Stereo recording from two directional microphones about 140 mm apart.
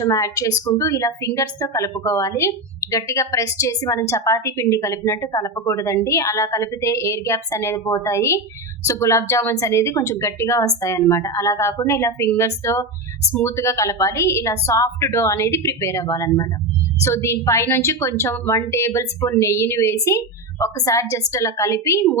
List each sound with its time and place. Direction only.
0.0 s a woman's voice: 25° left (ahead or behind)